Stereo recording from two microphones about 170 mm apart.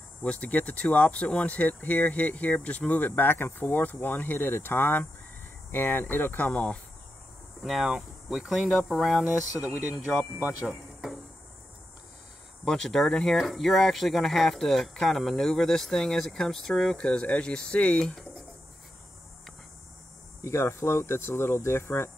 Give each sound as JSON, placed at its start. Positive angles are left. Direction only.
{"t": 0.2, "sound": "speech", "side_deg": 5}
{"t": 10.4, "sound": "speech", "side_deg": -5}
{"t": 12.6, "sound": "speech", "side_deg": 5}
{"t": 20.4, "sound": "speech", "side_deg": 15}